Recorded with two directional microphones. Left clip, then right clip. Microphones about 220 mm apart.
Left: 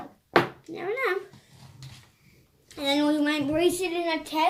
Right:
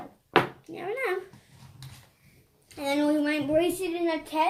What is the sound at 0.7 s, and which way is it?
Speech, 10° left (ahead or behind).